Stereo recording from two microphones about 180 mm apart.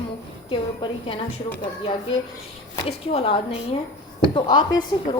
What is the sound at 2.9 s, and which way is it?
A woman's voice, 30° left (ahead or behind).